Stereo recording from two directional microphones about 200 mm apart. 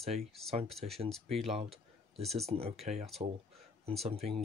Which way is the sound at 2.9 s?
35° right (ahead or behind).